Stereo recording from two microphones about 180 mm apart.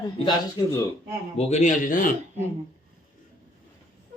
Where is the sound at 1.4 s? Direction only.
40° left (ahead or behind).